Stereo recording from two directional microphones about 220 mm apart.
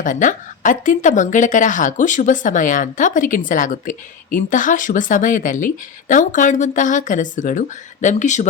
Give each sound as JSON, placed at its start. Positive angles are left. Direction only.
{"t": 0.0, "sound": "speech", "side_deg": 35}